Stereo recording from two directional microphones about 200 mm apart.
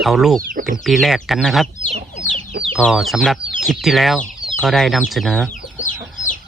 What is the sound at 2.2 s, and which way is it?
Chicken, 40° left (ahead or behind).